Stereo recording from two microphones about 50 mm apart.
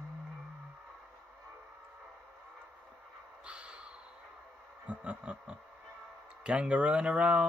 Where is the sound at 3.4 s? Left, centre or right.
Right.